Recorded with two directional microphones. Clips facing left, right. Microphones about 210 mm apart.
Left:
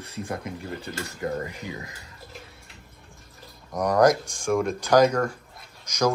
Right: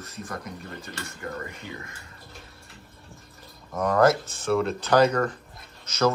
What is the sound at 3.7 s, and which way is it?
Speech, 15° left (ahead or behind).